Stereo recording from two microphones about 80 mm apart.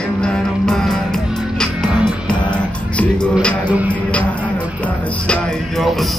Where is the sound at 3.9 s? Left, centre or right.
Centre.